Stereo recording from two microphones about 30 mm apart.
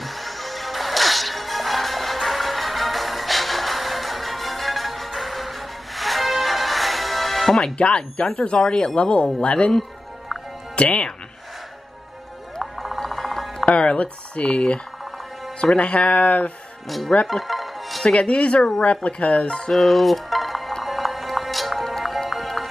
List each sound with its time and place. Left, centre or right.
0.0 s whip: centre
5.9 s music: centre
7.7 s speech: left
10.8 s speech: left
13.0 s music: centre
13.7 s speech: left
15.8 s speech: left
17.3 s music: centre
18.0 s speech: left
19.7 s stir: centre
20.8 s music: centre